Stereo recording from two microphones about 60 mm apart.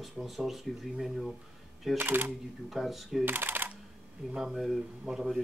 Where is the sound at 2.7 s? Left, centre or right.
Centre.